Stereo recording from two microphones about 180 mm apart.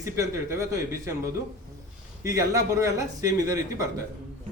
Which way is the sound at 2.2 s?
20° right (ahead or behind).